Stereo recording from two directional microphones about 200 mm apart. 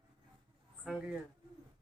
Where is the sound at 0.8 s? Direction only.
Centre (ahead or behind).